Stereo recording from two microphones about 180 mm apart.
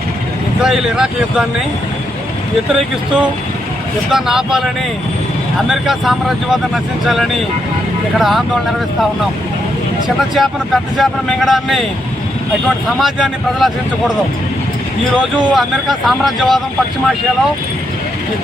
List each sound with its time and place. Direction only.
0.6 s speech: 5° right (ahead or behind)
4.1 s speech: centre (ahead or behind)
10.2 s speech: centre (ahead or behind)
13.0 s speech: centre (ahead or behind)
15.5 s speech: centre (ahead or behind)